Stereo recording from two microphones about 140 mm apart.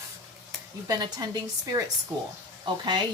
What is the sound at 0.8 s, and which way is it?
A woman's voice, 30° right (ahead or behind).